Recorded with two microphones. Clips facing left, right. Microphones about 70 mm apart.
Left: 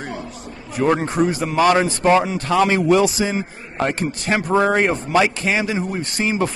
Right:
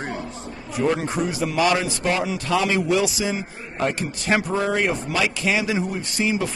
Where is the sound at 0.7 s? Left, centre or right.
Left.